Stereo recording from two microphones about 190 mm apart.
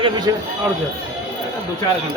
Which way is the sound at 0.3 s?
20° right (ahead or behind).